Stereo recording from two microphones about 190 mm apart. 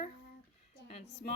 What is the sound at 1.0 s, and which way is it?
Speech, 60° left (ahead or behind).